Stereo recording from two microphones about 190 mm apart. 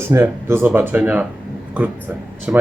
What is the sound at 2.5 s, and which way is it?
Speech, 10° right (ahead or behind).